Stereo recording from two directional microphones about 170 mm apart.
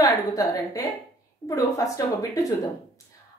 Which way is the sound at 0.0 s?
20° left (ahead or behind).